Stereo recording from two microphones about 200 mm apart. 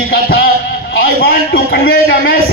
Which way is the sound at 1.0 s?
50° left (ahead or behind).